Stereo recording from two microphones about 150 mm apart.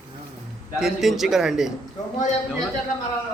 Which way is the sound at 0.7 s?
Centre (ahead or behind).